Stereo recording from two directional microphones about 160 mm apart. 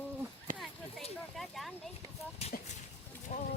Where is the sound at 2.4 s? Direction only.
40° left (ahead or behind).